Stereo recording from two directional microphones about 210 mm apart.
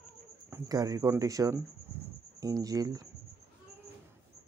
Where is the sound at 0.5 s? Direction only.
20° right (ahead or behind).